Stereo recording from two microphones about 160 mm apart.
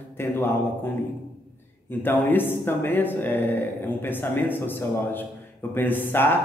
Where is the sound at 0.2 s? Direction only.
15° left (ahead or behind).